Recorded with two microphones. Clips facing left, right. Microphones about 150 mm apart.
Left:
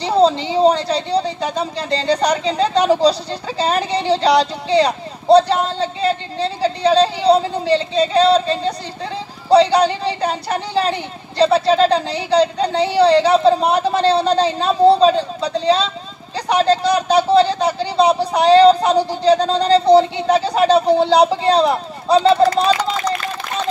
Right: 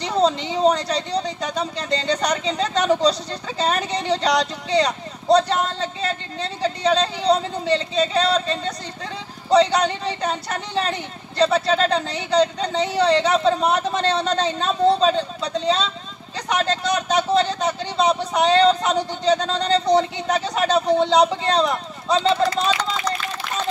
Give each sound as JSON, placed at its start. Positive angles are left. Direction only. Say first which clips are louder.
{"t": 0.0, "sound": "speech", "louder": "left 5 dB", "side_deg": 30}